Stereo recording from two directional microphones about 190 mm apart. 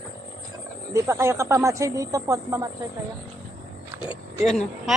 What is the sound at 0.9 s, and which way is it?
Speech, 15° right (ahead or behind).